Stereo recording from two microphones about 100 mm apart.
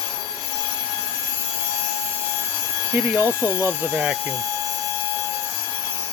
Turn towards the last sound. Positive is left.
turn(degrees=-10)  # may be behind; listen again after turning